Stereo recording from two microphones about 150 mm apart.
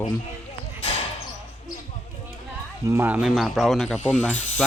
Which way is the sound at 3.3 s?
Centre (ahead or behind).